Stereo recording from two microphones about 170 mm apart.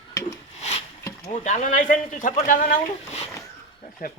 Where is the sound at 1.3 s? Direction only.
45° left (ahead or behind).